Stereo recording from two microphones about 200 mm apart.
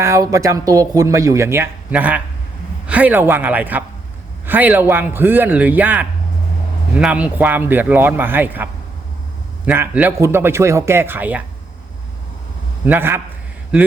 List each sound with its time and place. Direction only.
0.0 s speech: 15° right (ahead or behind)
12.8 s speech: 10° right (ahead or behind)